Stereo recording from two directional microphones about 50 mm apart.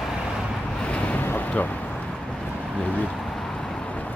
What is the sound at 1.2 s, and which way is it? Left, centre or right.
Boat, left.